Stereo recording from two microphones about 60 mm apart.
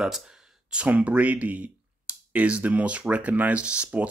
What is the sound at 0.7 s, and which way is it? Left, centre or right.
Speech, right.